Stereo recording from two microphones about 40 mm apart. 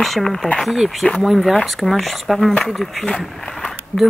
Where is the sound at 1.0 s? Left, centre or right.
Left.